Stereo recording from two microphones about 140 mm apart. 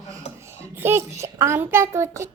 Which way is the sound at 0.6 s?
15° right (ahead or behind).